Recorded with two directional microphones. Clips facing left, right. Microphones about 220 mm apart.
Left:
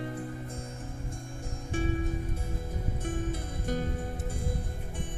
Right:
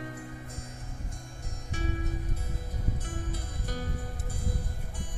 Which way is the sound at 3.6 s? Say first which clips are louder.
Left 5 dB; 25° left (ahead or behind).